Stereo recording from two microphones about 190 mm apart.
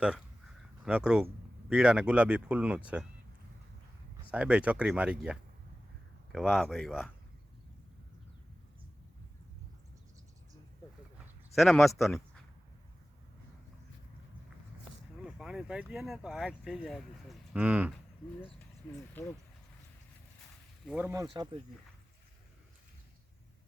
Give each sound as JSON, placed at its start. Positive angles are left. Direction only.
{"t": 0.9, "sound": "speech", "side_deg": -5}
{"t": 4.3, "sound": "speech", "side_deg": -5}
{"t": 11.5, "sound": "speech", "side_deg": 0}
{"t": 15.2, "sound": "speech", "side_deg": -5}
{"t": 18.8, "sound": "speech", "side_deg": 5}
{"t": 20.8, "sound": "speech", "side_deg": -5}
{"t": 21.1, "sound": "speech", "side_deg": -20}